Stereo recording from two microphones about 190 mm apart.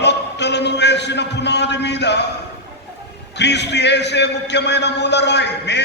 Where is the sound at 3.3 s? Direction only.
65° left (ahead or behind).